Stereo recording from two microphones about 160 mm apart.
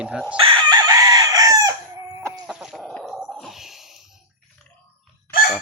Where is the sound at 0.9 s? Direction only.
25° right (ahead or behind).